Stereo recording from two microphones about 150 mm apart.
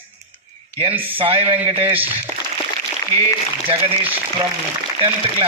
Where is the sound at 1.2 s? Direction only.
35° right (ahead or behind).